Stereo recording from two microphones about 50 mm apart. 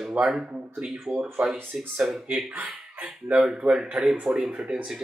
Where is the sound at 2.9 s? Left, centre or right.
Right.